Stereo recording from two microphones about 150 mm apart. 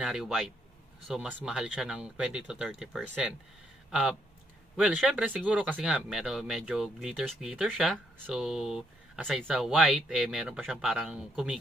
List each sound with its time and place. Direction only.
0.0 s speech: 5° right (ahead or behind)